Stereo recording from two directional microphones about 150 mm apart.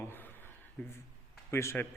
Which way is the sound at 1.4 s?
15° left (ahead or behind).